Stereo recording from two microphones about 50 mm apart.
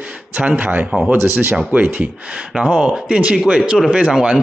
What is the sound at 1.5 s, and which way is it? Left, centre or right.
Speech, right.